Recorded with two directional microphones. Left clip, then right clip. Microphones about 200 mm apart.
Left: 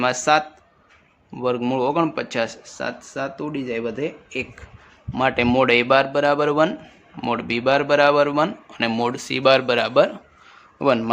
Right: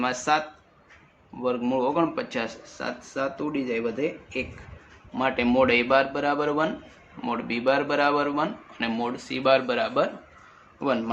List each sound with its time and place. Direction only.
0.0 s a man's voice: 55° left (ahead or behind)
5.1 s a man's voice: 60° left (ahead or behind)